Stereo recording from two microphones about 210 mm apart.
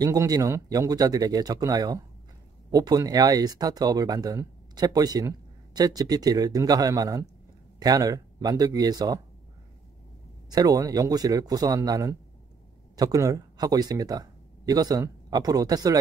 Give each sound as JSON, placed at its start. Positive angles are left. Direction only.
{"t": 0.0, "sound": "speech", "side_deg": -15}
{"t": 10.5, "sound": "speech", "side_deg": -15}